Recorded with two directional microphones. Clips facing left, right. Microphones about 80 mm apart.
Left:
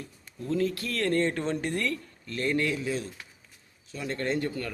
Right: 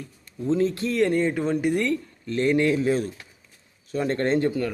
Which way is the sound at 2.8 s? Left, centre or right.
Right.